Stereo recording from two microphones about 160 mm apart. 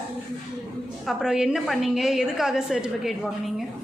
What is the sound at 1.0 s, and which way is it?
A woman's voice, 5° right (ahead or behind).